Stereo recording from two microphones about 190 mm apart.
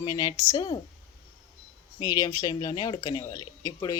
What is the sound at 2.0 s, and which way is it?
A woman's voice, 20° left (ahead or behind).